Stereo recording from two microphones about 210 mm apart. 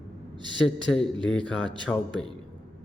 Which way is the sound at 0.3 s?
20° right (ahead or behind).